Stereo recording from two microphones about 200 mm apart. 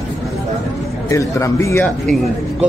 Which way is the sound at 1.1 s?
15° left (ahead or behind).